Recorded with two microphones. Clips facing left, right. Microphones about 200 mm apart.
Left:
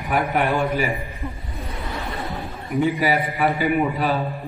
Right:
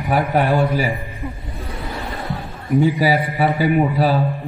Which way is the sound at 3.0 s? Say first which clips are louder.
Right 3 dB; 35° right (ahead or behind).